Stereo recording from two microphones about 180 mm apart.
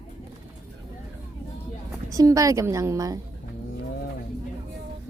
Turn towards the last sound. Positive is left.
turn(degrees=-20)  # may be behind; listen again after turning